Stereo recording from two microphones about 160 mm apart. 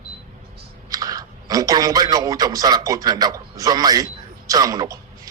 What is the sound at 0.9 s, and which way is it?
A man's voice, 25° right (ahead or behind).